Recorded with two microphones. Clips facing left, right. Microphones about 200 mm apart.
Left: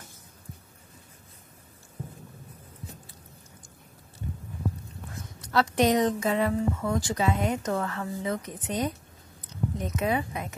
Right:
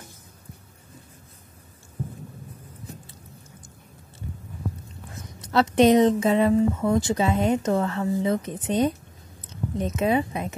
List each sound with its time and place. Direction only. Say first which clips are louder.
5.4 s speech: right 5 dB; 25° right (ahead or behind)